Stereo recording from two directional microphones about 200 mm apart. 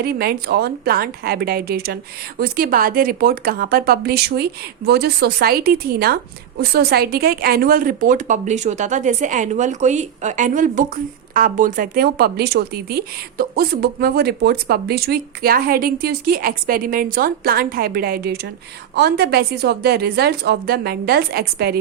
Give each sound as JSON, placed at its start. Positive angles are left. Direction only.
{"t": 0.0, "sound": "a woman's voice", "side_deg": -55}